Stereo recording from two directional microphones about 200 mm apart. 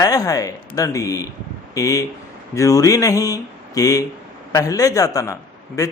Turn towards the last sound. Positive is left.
turn(degrees=15)  # may be behind; listen again after turning